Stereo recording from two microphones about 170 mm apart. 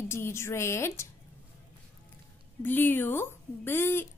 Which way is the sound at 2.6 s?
10° left (ahead or behind).